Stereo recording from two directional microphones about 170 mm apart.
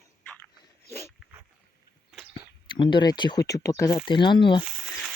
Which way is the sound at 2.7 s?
25° left (ahead or behind).